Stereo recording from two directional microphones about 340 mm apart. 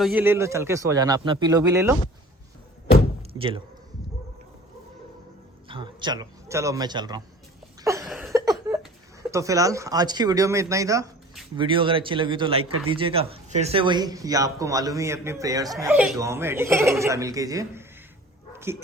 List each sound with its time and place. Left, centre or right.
0.0 s speech: centre
3.3 s speech: centre
5.6 s speech: centre
7.9 s a sound: centre
9.3 s speech: centre